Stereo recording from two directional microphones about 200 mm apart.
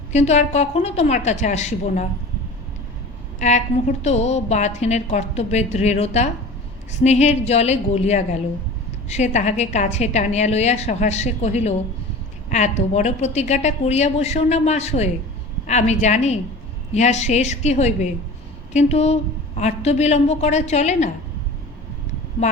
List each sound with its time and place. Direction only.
0.1 s a woman's voice: 35° left (ahead or behind)
3.4 s a woman's voice: 35° left (ahead or behind)